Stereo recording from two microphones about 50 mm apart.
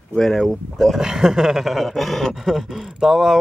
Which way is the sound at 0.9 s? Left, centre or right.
Centre.